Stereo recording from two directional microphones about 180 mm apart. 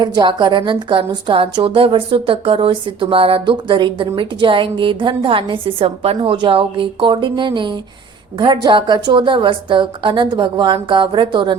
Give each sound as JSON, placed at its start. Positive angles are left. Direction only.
{"t": 0.0, "sound": "a woman's voice", "side_deg": -25}